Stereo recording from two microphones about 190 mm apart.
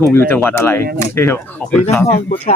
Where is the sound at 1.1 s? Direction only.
15° left (ahead or behind).